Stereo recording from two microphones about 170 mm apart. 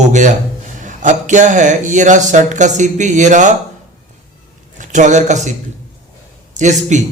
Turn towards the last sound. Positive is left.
turn(degrees=-45)  # may be behind; listen again after turning